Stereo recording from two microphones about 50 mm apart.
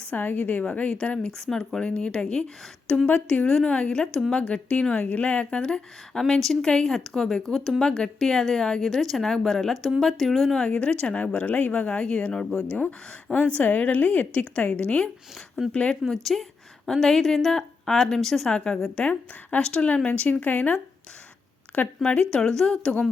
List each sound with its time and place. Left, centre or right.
0.1 s a woman's voice: left
1.3 s a woman's voice: centre
1.8 s a woman's voice: left; by 7.8 s centre
7.8 s a woman's voice: centre
10.7 s speech: centre
13.3 s a woman's voice: left
14.8 s speech: left
16.0 s a woman's voice: centre
18.9 s a woman's voice: left
22.0 s a woman's voice: left